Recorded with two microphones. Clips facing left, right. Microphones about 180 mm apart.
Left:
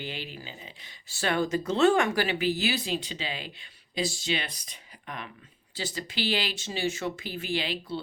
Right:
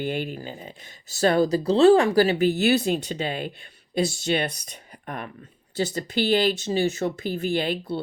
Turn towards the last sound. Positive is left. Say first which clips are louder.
# right 6 dB
turn(degrees=-50)  # may be behind; listen again after turning